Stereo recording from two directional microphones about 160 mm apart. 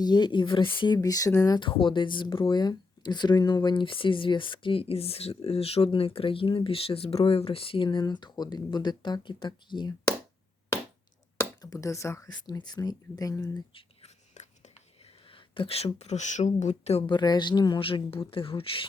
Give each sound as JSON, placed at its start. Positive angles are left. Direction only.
{"t": 0.0, "sound": "speech", "side_deg": 25}
{"t": 11.3, "sound": "speech", "side_deg": 20}
{"t": 13.7, "sound": "writing", "side_deg": 40}
{"t": 15.3, "sound": "speech", "side_deg": 35}
{"t": 17.2, "sound": "speech", "side_deg": 25}